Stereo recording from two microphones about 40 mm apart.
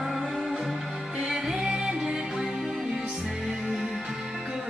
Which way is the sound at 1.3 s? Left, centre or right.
Centre.